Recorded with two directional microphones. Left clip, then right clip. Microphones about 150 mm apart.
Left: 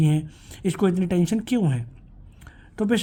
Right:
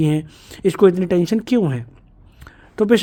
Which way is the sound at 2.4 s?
40° right (ahead or behind).